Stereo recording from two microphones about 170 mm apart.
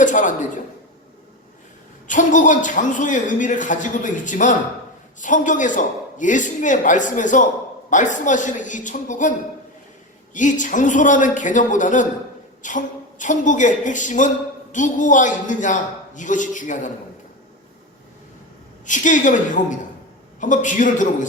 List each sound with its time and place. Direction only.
0.0 s a man's voice: 50° left (ahead or behind)
2.0 s a man's voice: 50° left (ahead or behind)
10.3 s a man's voice: 50° left (ahead or behind)
18.9 s a man's voice: 50° left (ahead or behind)